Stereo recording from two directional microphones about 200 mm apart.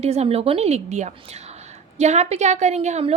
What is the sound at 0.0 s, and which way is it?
A woman's voice, 30° right (ahead or behind).